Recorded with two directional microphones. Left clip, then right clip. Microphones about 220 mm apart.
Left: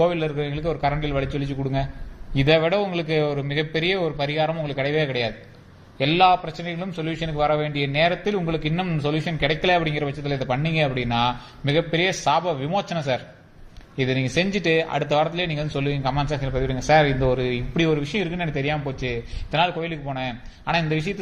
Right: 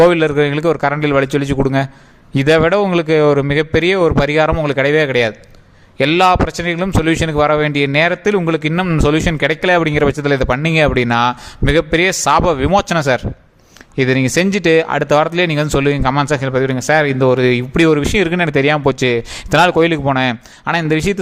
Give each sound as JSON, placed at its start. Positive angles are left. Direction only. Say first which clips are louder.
{"t": 0.0, "sound": "a man's voice", "louder": "right 11 dB", "side_deg": -50}